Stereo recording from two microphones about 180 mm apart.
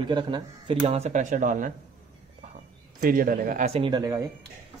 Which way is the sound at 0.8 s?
40° right (ahead or behind).